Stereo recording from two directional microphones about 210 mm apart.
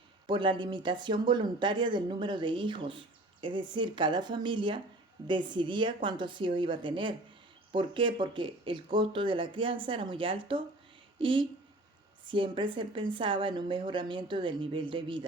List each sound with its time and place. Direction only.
0.3 s speech: 25° right (ahead or behind)